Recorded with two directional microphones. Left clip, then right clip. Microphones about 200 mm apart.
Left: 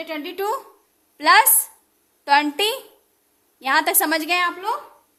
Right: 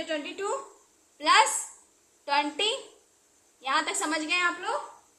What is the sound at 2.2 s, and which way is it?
A woman's voice, 65° left (ahead or behind).